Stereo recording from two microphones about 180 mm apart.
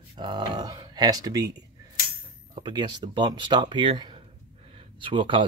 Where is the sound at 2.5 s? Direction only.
25° right (ahead or behind).